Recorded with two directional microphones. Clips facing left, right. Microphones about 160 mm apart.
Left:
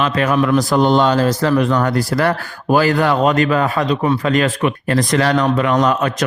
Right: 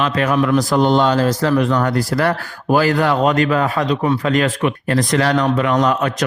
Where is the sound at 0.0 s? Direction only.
30° left (ahead or behind).